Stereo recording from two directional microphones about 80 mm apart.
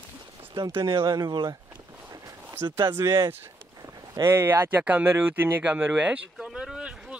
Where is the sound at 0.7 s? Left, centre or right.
Right.